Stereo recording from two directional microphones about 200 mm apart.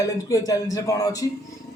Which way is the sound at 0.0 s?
15° left (ahead or behind).